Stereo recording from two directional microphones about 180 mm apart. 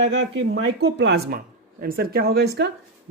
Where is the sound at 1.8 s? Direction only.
55° right (ahead or behind).